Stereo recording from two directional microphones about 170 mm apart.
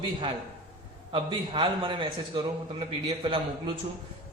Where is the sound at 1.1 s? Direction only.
30° right (ahead or behind).